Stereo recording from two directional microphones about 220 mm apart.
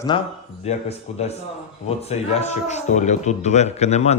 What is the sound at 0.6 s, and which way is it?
Speech, 30° left (ahead or behind).